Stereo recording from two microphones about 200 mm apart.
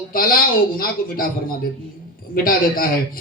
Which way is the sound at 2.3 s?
45° left (ahead or behind).